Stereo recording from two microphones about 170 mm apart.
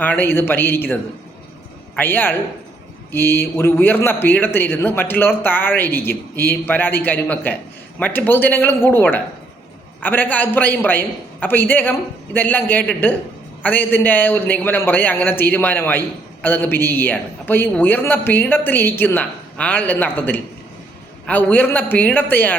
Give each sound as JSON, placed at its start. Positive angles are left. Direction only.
{"t": 0.0, "sound": "a man's voice", "side_deg": 10}
{"t": 2.0, "sound": "a man's voice", "side_deg": 10}